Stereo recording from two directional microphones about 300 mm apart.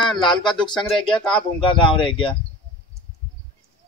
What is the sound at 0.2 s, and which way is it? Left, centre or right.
Speech, centre.